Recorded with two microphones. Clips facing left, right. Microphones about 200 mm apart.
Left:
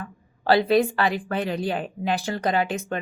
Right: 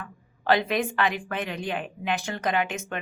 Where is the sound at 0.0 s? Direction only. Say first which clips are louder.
Left 3 dB; 35° left (ahead or behind).